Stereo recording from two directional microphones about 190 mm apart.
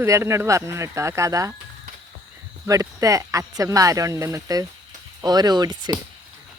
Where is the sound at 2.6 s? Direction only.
15° right (ahead or behind).